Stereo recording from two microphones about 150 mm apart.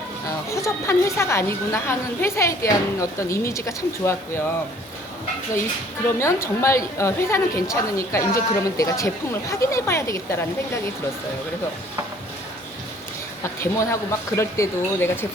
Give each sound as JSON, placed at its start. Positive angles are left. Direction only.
{"t": 0.3, "sound": "a woman's voice", "side_deg": 20}
{"t": 6.1, "sound": "a woman's voice", "side_deg": 20}
{"t": 13.4, "sound": "speech", "side_deg": 20}